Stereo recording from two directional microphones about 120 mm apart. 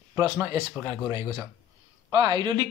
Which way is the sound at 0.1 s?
30° right (ahead or behind).